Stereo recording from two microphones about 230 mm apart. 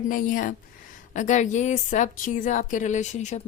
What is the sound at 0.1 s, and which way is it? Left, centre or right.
A woman's voice, left.